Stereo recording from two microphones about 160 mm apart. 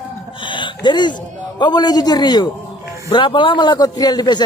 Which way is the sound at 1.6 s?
25° left (ahead or behind).